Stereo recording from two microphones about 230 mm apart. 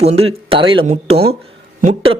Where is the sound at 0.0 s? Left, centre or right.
Right.